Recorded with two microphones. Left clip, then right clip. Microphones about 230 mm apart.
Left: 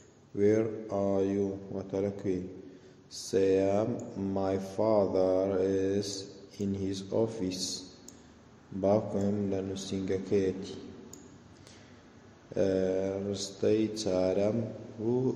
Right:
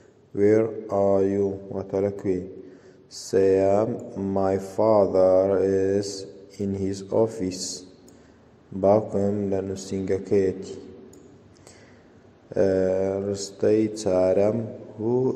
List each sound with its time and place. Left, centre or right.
0.4 s mantra: centre
8.8 s mantra: centre
12.5 s mantra: centre